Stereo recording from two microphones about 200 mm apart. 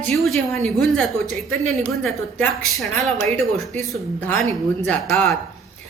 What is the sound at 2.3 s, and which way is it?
A woman's voice, centre (ahead or behind).